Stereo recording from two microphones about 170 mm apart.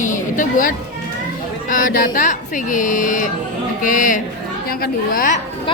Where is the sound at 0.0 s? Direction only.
50° left (ahead or behind).